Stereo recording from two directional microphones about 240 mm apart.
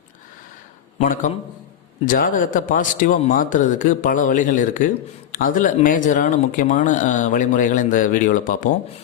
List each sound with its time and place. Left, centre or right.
0.9 s a man's voice: left